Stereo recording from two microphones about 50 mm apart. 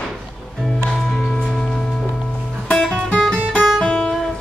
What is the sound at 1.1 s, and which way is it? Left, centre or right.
Music, centre.